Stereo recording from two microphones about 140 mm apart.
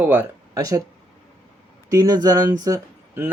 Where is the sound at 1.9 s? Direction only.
30° right (ahead or behind).